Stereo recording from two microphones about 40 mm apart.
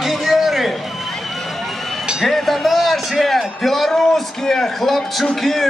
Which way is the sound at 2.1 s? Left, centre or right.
Centre.